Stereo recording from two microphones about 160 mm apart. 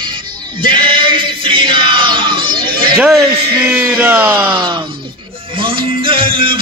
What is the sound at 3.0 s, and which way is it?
Speech, centre (ahead or behind).